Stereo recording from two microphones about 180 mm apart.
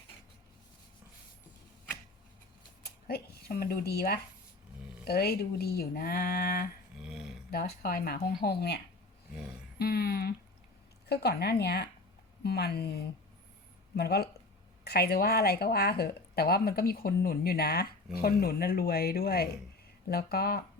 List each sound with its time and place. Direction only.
2.8 s speech: 55° left (ahead or behind)
7.0 s a sound: 5° right (ahead or behind)
7.5 s speech: 55° left (ahead or behind)
9.7 s a sound: 60° left (ahead or behind)
11.1 s speech: 65° left (ahead or behind)
13.9 s speech: 60° left (ahead or behind)